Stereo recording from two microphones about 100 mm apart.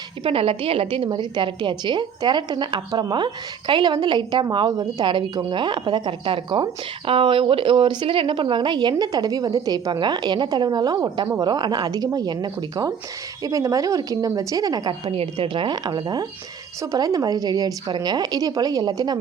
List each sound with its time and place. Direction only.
0.3 s a woman's voice: 65° right (ahead or behind); by 15.1 s 40° right (ahead or behind)
15.1 s a woman's voice: 60° right (ahead or behind); by 19.2 s 40° right (ahead or behind)